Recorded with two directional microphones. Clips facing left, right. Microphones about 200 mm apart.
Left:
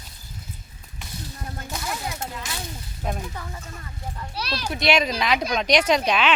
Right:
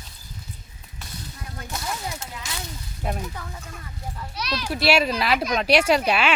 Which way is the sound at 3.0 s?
5° right (ahead or behind).